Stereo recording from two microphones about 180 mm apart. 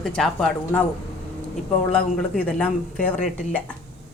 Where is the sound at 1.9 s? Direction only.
10° left (ahead or behind).